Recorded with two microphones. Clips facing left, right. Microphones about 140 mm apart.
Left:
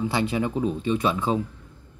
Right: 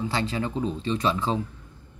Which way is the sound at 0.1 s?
15° left (ahead or behind).